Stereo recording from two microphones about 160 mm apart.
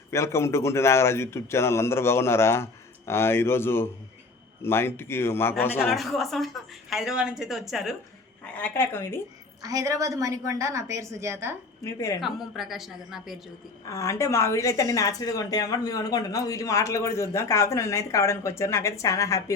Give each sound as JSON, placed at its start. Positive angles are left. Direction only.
{"t": 0.1, "sound": "speech", "side_deg": 15}
{"t": 5.9, "sound": "a woman's voice", "side_deg": 0}
{"t": 8.5, "sound": "speech", "side_deg": 10}
{"t": 9.6, "sound": "a woman's voice", "side_deg": -20}
{"t": 11.8, "sound": "a woman's voice", "side_deg": 20}
{"t": 12.2, "sound": "a woman's voice", "side_deg": 0}
{"t": 13.8, "sound": "a woman's voice", "side_deg": 20}